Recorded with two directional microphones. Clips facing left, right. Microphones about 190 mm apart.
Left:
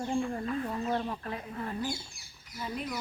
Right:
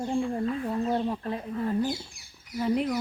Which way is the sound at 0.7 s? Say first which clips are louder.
Right 5 dB; 30° right (ahead or behind).